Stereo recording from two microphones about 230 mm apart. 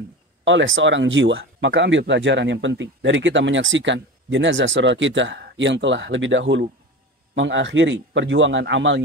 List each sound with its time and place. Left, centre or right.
0.5 s speech: right